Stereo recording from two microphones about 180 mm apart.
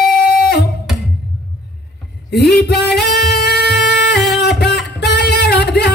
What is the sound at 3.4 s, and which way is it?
Music, 70° left (ahead or behind).